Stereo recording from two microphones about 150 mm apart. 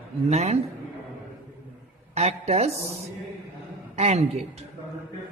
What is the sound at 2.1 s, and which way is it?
Speech, 45° right (ahead or behind).